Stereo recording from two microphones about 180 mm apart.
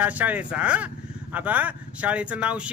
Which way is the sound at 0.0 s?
10° right (ahead or behind).